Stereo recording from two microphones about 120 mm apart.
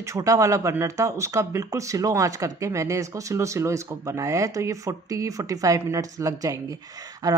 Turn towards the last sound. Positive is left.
turn(degrees=-30)  # may be behind; listen again after turning